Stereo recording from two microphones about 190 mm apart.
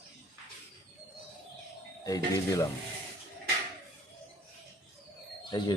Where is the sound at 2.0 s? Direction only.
20° left (ahead or behind).